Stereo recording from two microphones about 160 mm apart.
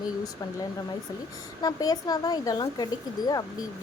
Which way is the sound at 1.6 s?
25° left (ahead or behind).